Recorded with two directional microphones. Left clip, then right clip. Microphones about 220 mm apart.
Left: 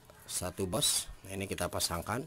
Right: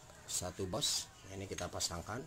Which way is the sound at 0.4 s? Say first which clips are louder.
Left 5 dB; 30° left (ahead or behind).